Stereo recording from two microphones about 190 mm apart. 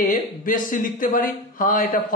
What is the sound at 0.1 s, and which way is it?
A man's voice, 45° left (ahead or behind).